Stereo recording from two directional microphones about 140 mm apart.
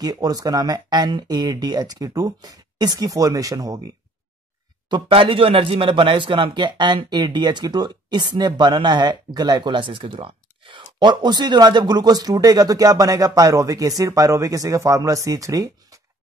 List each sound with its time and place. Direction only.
0.0 s a man's voice: 25° right (ahead or behind)